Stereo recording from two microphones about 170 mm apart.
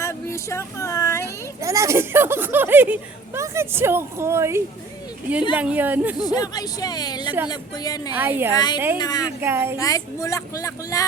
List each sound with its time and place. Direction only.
0.0 s a sound: 15° left (ahead or behind)
1.6 s speech: 15° right (ahead or behind)
6.1 s speech: 25° left (ahead or behind)
8.1 s speech: 10° right (ahead or behind)
8.5 s speech: 25° left (ahead or behind)
9.4 s speech: 10° right (ahead or behind)
9.7 s speech: 20° left (ahead or behind)